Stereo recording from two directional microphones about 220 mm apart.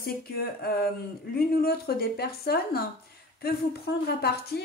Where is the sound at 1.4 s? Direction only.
45° left (ahead or behind).